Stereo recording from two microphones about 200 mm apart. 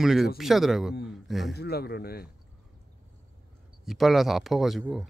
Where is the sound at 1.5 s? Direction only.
50° left (ahead or behind).